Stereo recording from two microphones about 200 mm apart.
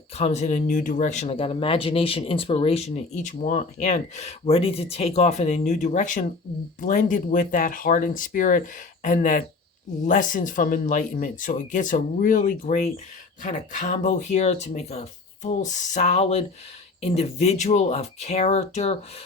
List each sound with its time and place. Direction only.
0.2 s speech: 35° left (ahead or behind)